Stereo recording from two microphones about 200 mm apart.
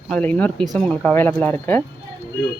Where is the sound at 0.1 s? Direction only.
5° left (ahead or behind).